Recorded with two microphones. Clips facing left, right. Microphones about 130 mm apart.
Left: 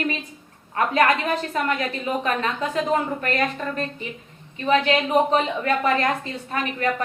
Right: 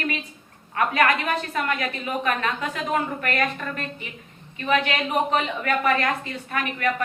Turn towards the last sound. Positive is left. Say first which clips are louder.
# left 1 dB
turn(degrees=30)  # may be behind; listen again after turning